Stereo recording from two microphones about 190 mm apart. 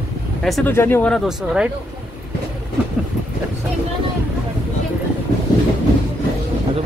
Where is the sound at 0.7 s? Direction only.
10° left (ahead or behind); by 1.7 s 5° right (ahead or behind).